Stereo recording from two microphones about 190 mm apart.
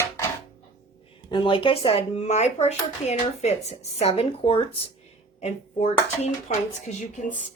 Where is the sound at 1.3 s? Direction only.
25° left (ahead or behind).